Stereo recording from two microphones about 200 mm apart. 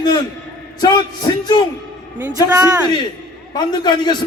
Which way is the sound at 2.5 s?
10° right (ahead or behind).